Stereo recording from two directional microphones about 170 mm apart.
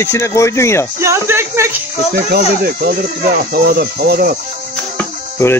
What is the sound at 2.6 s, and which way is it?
Speech, 60° right (ahead or behind).